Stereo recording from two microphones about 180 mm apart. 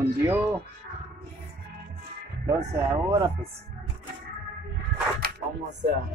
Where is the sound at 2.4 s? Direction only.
15° right (ahead or behind).